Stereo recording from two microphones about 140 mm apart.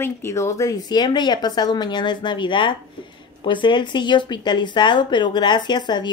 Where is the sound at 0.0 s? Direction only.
20° left (ahead or behind).